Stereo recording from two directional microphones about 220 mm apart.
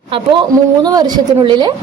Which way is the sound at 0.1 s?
20° right (ahead or behind).